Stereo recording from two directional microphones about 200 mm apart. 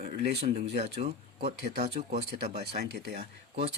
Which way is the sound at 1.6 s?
50° right (ahead or behind).